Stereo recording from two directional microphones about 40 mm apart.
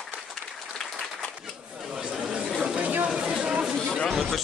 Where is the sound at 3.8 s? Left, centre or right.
Left.